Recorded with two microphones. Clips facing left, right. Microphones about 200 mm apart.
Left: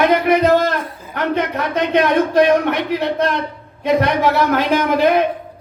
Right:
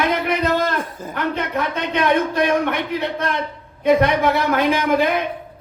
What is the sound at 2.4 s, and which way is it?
Speech, 55° right (ahead or behind).